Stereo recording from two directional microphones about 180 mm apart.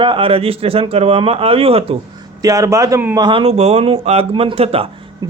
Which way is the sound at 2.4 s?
20° right (ahead or behind).